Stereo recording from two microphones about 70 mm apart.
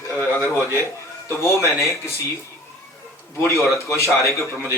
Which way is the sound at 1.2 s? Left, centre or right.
Left.